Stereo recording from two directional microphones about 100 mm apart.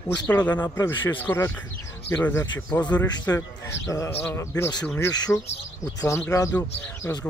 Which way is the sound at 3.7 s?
30° left (ahead or behind).